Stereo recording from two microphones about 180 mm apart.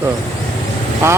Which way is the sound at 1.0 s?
15° right (ahead or behind).